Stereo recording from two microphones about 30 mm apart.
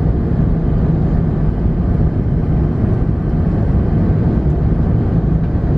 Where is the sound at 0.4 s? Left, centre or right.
Centre.